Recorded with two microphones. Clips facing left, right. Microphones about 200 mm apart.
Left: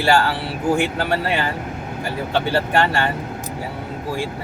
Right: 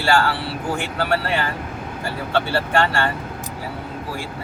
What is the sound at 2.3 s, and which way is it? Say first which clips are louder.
Speech: left 1 dB; 15° left (ahead or behind).